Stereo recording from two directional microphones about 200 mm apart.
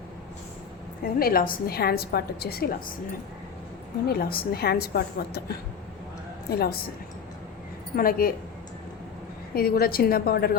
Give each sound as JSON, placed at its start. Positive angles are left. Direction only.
{"t": 1.2, "sound": "a woman's voice", "side_deg": 45}
{"t": 4.1, "sound": "a woman's voice", "side_deg": 50}
{"t": 6.5, "sound": "a woman's voice", "side_deg": 50}
{"t": 7.9, "sound": "a woman's voice", "side_deg": 45}
{"t": 9.6, "sound": "a woman's voice", "side_deg": 50}